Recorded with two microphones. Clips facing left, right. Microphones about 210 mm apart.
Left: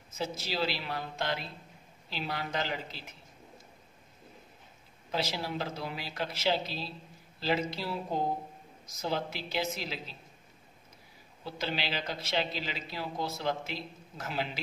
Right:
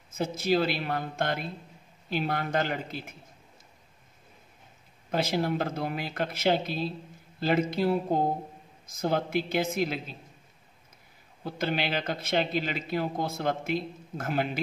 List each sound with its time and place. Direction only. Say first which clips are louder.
0.1 s a man's voice: right 9 dB; 50° right (ahead or behind)
5.1 s a man's voice: right 6 dB; 55° right (ahead or behind)
11.4 s a man's voice: right 5 dB; 50° right (ahead or behind)